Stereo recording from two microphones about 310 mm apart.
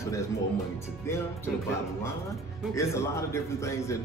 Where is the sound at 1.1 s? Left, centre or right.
Centre.